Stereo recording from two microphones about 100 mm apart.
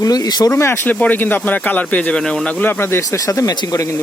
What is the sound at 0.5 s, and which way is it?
Speech, 25° left (ahead or behind).